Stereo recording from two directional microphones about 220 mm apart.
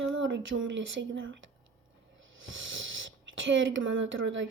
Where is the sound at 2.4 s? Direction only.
60° right (ahead or behind).